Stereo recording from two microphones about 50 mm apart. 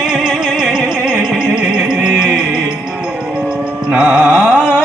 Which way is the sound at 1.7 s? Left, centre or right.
Right.